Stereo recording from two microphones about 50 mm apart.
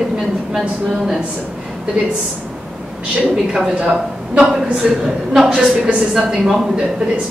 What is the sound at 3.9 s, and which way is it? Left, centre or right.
A woman's voice, centre.